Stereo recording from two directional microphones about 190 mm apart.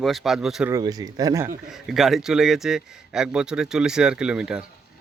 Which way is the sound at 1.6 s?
Centre (ahead or behind).